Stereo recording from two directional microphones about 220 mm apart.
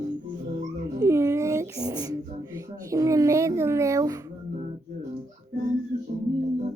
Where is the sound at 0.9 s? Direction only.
15° right (ahead or behind).